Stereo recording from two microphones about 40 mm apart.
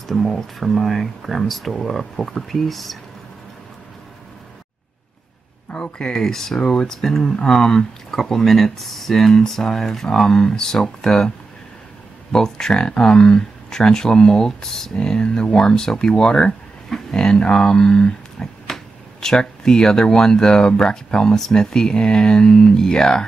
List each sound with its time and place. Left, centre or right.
0.0 s speech: centre
5.8 s speech: centre
7.0 s speech: centre